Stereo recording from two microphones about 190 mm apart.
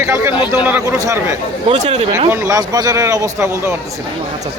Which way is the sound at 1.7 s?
35° right (ahead or behind).